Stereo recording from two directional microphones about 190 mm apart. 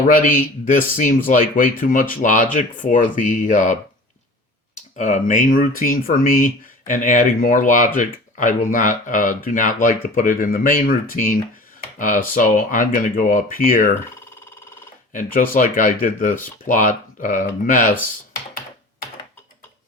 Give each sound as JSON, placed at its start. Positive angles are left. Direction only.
{"t": 0.1, "sound": "speech", "side_deg": 45}
{"t": 4.9, "sound": "speech", "side_deg": 40}
{"t": 15.1, "sound": "speech", "side_deg": 45}